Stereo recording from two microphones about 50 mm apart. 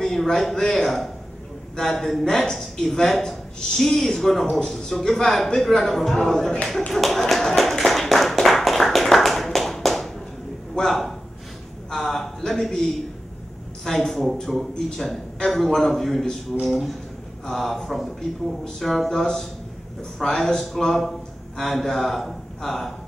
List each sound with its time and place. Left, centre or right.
0.0 s a man's voice: centre
6.9 s tap: centre
10.7 s a sound: centre
13.8 s a man's voice: centre